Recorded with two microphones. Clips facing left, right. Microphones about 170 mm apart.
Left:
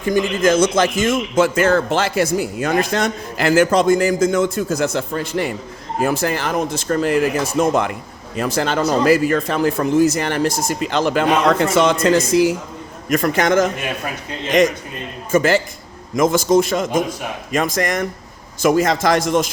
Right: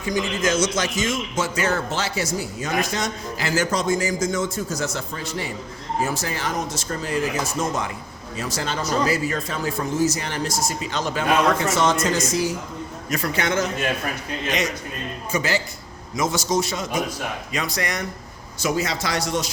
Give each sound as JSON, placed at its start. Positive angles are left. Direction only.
{"t": 0.0, "sound": "a man's voice", "side_deg": 55}
{"t": 13.1, "sound": "a man's voice", "side_deg": 50}
{"t": 15.3, "sound": "a man's voice", "side_deg": 50}